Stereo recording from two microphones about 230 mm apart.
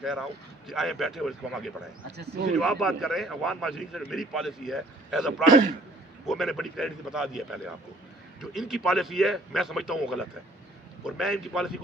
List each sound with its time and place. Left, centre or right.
0.0 s a man's voice: centre
2.1 s speech: right
2.6 s a man's voice: centre